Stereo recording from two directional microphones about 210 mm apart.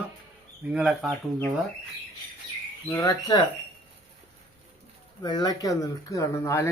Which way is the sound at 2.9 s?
15° left (ahead or behind).